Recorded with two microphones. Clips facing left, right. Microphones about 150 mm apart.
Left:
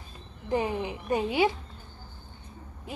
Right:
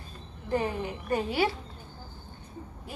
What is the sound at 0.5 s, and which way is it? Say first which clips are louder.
A woman's voice: left 1 dB; 15° left (ahead or behind).